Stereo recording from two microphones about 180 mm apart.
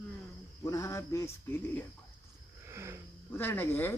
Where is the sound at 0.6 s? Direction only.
15° left (ahead or behind).